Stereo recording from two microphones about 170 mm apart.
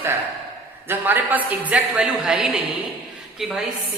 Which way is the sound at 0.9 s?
10° right (ahead or behind).